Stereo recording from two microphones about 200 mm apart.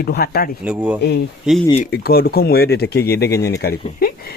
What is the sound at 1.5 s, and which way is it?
Speech, 5° right (ahead or behind).